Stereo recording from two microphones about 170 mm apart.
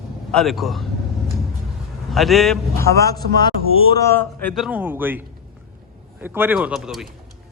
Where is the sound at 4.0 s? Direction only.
15° left (ahead or behind).